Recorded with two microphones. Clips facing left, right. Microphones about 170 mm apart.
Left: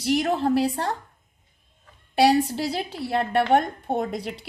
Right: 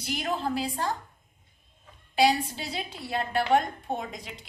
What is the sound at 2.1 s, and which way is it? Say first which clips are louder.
A woman's voice: left 5 dB; 65° left (ahead or behind).